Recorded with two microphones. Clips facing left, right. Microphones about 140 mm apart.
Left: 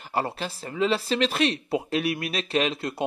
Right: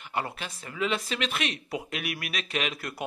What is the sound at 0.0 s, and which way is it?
A man's voice, 35° left (ahead or behind).